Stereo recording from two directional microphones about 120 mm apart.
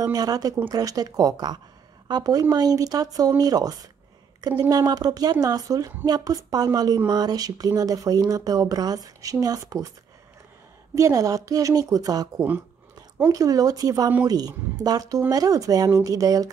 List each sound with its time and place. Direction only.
0.0 s a woman's voice: 30° right (ahead or behind)
11.0 s a woman's voice: 30° right (ahead or behind)
13.3 s speech: 30° right (ahead or behind)